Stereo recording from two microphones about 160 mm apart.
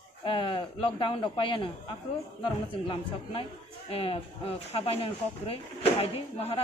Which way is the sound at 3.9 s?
35° left (ahead or behind).